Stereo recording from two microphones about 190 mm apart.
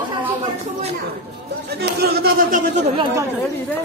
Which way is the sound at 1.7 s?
55° right (ahead or behind).